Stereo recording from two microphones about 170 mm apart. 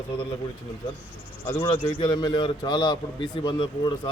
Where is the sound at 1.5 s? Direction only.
25° left (ahead or behind).